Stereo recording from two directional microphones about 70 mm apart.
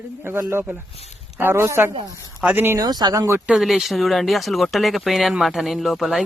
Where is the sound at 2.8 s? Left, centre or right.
Right.